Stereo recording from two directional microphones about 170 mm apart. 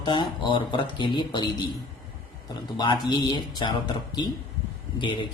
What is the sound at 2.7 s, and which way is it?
Speech, 25° left (ahead or behind).